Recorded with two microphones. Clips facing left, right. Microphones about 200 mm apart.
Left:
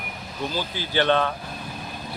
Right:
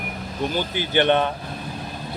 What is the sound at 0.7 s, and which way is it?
Speech, 20° right (ahead or behind).